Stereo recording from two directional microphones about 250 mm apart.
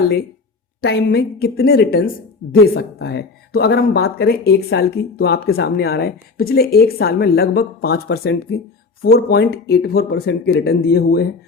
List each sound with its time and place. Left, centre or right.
0.8 s speech: left